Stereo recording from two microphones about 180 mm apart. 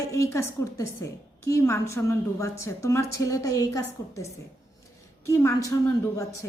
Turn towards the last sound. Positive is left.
turn(degrees=15)  # may be behind; listen again after turning